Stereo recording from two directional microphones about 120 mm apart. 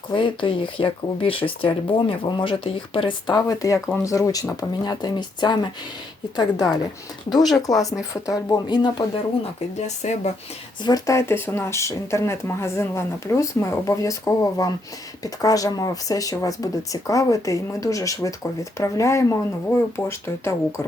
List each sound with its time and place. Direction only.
0.1 s speech: 45° left (ahead or behind)
7.4 s speech: centre (ahead or behind)
8.1 s speech: 30° left (ahead or behind)
9.7 s speech: 70° left (ahead or behind)
10.8 s speech: 30° left (ahead or behind)